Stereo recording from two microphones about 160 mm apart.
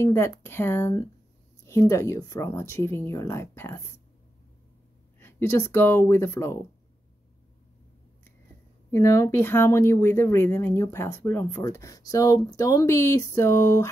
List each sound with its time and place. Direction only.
0.0 s speech: 15° left (ahead or behind)
5.2 s speech: 15° left (ahead or behind)
8.9 s speech: 20° left (ahead or behind)